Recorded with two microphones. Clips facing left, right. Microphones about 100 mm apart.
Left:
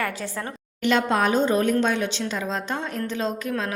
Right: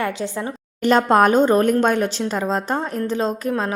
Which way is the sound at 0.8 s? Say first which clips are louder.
Right 6 dB; 45° right (ahead or behind).